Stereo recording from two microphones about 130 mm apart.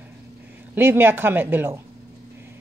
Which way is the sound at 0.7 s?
15° right (ahead or behind).